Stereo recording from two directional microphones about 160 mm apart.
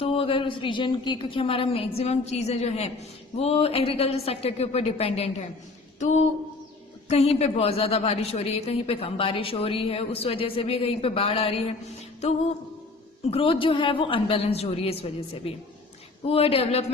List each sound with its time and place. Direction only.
0.0 s a woman's voice: 35° left (ahead or behind)
6.0 s a sound: 45° left (ahead or behind)
7.1 s a woman's voice: 40° left (ahead or behind)
13.3 s a woman's voice: 35° left (ahead or behind)